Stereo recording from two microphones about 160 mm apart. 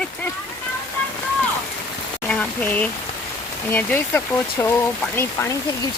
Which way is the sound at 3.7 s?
10° left (ahead or behind).